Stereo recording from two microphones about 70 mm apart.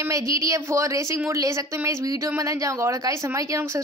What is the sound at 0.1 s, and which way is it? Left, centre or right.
Speech, right.